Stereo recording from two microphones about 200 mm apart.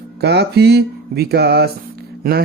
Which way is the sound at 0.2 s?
55° right (ahead or behind).